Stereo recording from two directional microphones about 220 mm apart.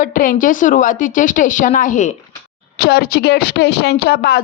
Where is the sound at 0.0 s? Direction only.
40° left (ahead or behind).